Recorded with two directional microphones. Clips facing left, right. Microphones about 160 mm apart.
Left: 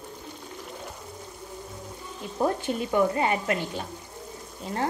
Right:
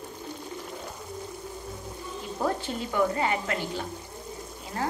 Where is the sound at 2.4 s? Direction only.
20° left (ahead or behind).